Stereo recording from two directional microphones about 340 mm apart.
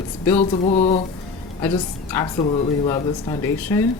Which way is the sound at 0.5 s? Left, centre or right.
Centre.